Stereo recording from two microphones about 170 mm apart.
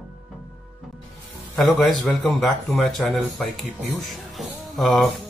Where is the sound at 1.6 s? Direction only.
Centre (ahead or behind).